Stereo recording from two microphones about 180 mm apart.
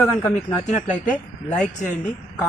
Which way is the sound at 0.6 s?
40° left (ahead or behind).